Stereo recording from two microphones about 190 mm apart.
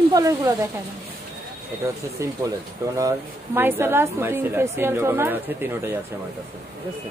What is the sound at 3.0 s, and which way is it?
A woman's voice, 15° right (ahead or behind).